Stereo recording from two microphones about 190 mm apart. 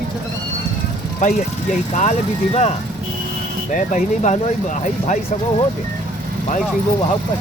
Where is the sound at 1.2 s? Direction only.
40° left (ahead or behind).